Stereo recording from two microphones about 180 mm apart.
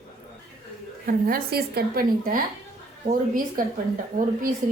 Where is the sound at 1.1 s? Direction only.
55° right (ahead or behind).